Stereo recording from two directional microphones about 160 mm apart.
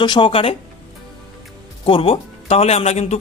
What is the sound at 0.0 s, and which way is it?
Speech, 30° left (ahead or behind).